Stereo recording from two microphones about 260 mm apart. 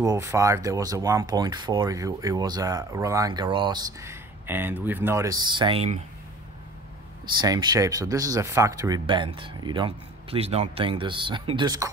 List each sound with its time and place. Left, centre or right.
0.0 s speech: centre
7.4 s speech: centre